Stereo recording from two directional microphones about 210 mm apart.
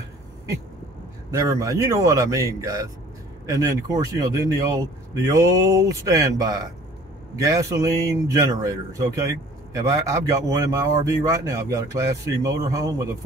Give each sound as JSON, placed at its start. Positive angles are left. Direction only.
{"t": 1.3, "sound": "a man's voice", "side_deg": -15}